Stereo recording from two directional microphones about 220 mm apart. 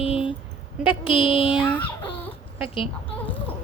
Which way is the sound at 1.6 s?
5° left (ahead or behind).